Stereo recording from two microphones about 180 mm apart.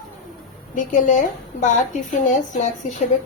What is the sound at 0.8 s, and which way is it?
A woman's voice, 45° left (ahead or behind).